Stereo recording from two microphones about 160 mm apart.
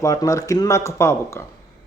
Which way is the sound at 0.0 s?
20° left (ahead or behind).